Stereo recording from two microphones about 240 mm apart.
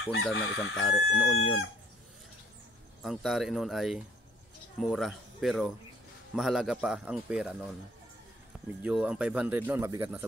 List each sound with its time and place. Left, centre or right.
0.3 s chicken: left
0.8 s a man's voice: centre
3.0 s a man's voice: centre
8.8 s speech: centre